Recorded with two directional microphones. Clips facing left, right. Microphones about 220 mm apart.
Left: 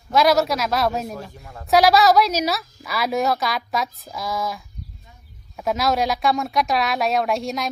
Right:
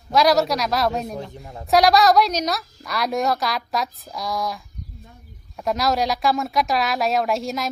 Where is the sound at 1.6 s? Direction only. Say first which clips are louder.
Even; centre (ahead or behind).